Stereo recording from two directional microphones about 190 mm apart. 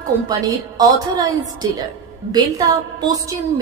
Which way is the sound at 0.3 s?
20° right (ahead or behind).